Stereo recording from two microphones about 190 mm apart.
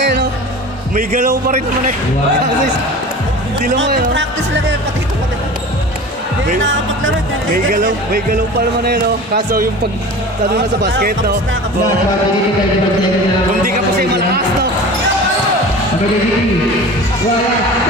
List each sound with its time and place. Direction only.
0.0 s music: 65° right (ahead or behind)
3.9 s speech: 70° right (ahead or behind)
6.6 s speech: 75° right (ahead or behind)
8.1 s speech: 55° right (ahead or behind)
10.8 s speech: 50° right (ahead or behind)